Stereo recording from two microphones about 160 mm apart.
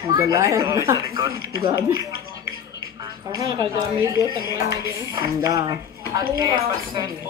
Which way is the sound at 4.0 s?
20° right (ahead or behind).